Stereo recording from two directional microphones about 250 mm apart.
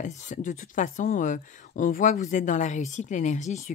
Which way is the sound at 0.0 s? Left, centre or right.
Left.